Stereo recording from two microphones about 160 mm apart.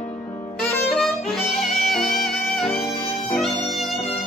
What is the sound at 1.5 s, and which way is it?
Music, centre (ahead or behind).